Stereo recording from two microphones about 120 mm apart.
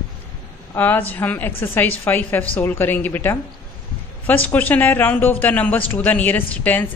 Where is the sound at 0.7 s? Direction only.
15° left (ahead or behind).